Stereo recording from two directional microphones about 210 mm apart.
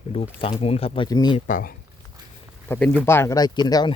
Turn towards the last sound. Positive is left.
turn(degrees=20)  # may be behind; listen again after turning